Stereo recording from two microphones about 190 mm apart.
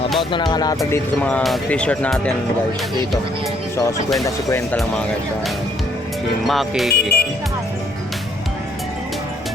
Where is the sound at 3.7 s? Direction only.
15° left (ahead or behind).